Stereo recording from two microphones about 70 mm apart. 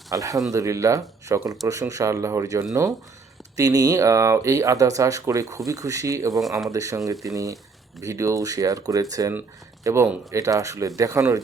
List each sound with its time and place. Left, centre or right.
0.1 s speech: right
3.6 s speech: right
9.9 s speech: right